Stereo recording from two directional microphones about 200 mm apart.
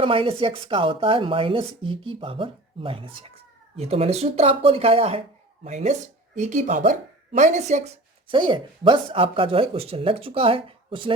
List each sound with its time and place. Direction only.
0.0 s a woman's voice: 25° right (ahead or behind)
8.3 s a woman's voice: 25° right (ahead or behind)